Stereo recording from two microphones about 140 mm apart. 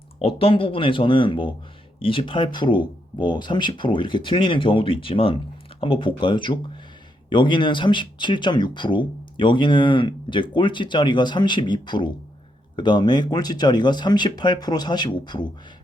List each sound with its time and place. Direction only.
0.2 s speech: 40° left (ahead or behind)